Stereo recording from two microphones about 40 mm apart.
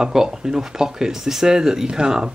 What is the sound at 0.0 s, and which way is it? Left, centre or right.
Speech, centre.